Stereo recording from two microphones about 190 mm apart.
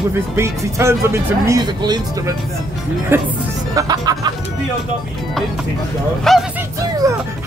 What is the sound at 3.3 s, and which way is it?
Speech, 20° right (ahead or behind).